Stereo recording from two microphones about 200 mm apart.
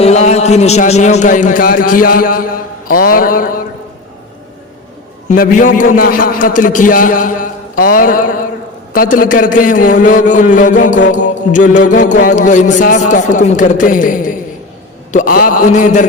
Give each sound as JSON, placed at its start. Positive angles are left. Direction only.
{"t": 0.0, "sound": "a man's voice", "side_deg": 35}
{"t": 5.3, "sound": "music", "side_deg": 40}
{"t": 7.8, "sound": "speech", "side_deg": 45}
{"t": 8.9, "sound": "music", "side_deg": 45}